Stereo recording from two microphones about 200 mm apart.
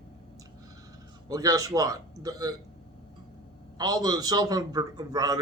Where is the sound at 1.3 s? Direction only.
20° right (ahead or behind).